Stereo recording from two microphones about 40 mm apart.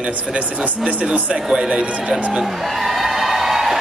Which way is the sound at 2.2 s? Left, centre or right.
Right.